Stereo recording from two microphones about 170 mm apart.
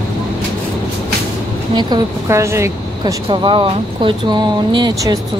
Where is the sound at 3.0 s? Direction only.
30° right (ahead or behind).